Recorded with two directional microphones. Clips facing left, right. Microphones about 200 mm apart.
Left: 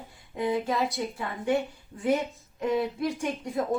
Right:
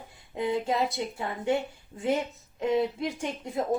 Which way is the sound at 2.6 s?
25° right (ahead or behind).